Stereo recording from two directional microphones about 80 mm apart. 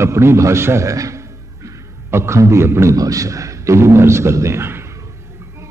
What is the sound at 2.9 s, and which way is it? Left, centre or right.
A man's voice, right.